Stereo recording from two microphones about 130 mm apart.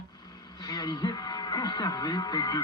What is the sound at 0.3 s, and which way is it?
Speech, 30° left (ahead or behind).